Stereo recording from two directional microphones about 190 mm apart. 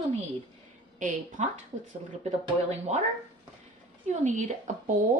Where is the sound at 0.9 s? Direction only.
40° right (ahead or behind).